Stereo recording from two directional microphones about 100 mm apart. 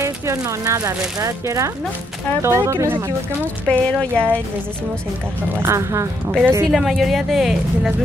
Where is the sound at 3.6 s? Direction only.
10° left (ahead or behind).